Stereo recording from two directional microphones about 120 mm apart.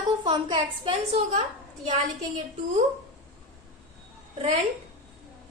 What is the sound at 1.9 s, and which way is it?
Speech, 75° right (ahead or behind).